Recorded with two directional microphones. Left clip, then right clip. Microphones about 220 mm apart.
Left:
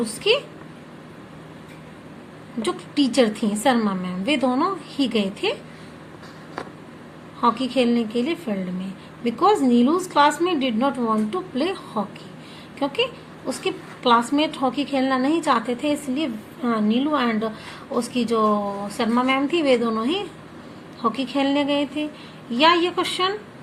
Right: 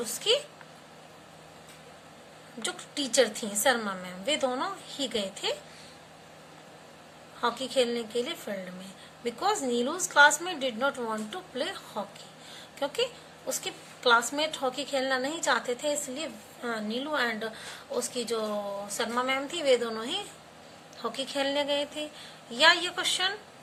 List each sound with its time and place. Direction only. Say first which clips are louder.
0.0 s a woman's voice: left 7 dB; 10° right (ahead or behind)
2.6 s a woman's voice: left 11 dB; 10° right (ahead or behind)
7.4 s a woman's voice: left 7 dB; 10° right (ahead or behind)